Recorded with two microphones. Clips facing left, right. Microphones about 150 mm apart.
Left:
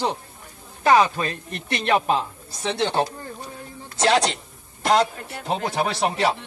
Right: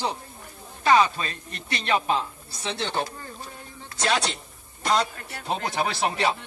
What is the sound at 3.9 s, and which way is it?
Speech, 30° left (ahead or behind).